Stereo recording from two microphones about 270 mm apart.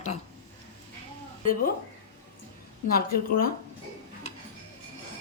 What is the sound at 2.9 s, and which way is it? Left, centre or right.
Speech, left.